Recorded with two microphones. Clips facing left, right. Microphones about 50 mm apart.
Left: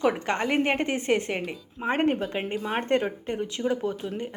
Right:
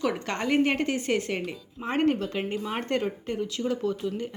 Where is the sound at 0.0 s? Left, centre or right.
Left.